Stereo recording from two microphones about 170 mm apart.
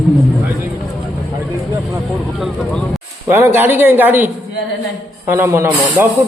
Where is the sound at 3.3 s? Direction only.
10° right (ahead or behind).